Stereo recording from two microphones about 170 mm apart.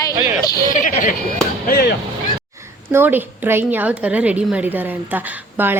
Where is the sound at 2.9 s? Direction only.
10° right (ahead or behind).